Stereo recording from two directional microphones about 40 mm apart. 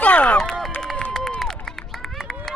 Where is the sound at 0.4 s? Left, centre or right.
Centre.